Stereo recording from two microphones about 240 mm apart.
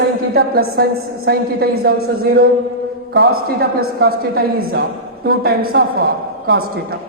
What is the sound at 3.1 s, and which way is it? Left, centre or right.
A woman's voice, right.